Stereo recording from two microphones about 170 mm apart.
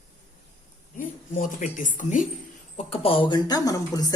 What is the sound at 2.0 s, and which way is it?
Speech, 50° left (ahead or behind).